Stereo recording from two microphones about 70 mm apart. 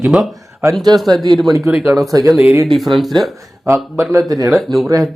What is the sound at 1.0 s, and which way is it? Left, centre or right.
Speech, right.